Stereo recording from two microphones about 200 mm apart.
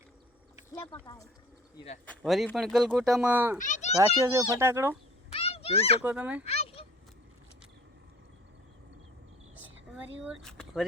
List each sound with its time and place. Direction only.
2.0 s fowl: centre (ahead or behind)
3.6 s children playing: 35° left (ahead or behind)
3.9 s a child's voice: 15° right (ahead or behind)
5.3 s a sound: 30° left (ahead or behind)
6.0 s a child's voice: 10° right (ahead or behind)
6.5 s a sound: 30° left (ahead or behind)
10.2 s fowl: centre (ahead or behind)